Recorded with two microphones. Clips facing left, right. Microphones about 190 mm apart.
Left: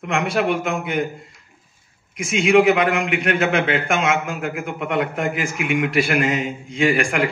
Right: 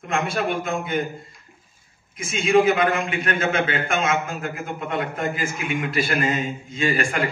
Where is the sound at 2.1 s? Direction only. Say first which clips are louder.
Left 3 dB; 75° left (ahead or behind).